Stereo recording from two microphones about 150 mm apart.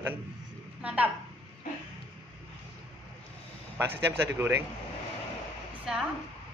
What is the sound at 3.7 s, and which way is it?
Speech, 15° right (ahead or behind).